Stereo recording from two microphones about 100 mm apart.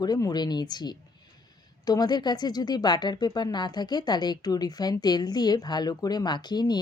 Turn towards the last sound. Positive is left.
turn(degrees=45)  # may be behind; listen again after turning